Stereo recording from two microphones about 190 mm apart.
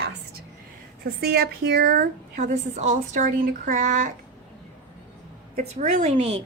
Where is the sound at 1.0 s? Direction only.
55° right (ahead or behind).